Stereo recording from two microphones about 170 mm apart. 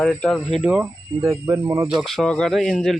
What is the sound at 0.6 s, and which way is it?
Speech, 5° right (ahead or behind).